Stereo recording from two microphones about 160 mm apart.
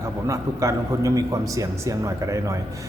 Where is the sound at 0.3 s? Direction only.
20° right (ahead or behind).